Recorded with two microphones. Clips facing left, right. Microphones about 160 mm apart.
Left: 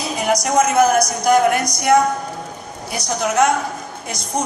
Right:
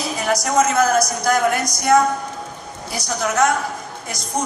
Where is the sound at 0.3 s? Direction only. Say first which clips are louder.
Left 1 dB; 20° left (ahead or behind).